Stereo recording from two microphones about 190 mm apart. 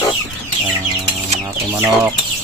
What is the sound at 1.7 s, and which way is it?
Speech, 10° right (ahead or behind).